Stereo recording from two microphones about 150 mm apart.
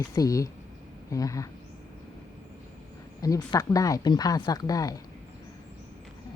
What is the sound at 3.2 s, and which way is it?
Speech, 25° left (ahead or behind).